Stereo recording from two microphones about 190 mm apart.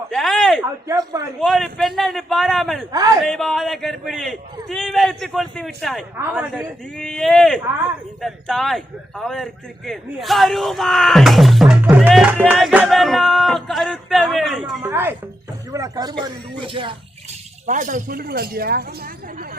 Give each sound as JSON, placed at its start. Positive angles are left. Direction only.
{"t": 0.1, "sound": "a sound", "side_deg": 0}
{"t": 0.9, "sound": "speech", "side_deg": -20}
{"t": 1.4, "sound": "a man's voice", "side_deg": 0}
{"t": 14.8, "sound": "speech", "side_deg": -10}
{"t": 17.7, "sound": "a man's voice", "side_deg": -40}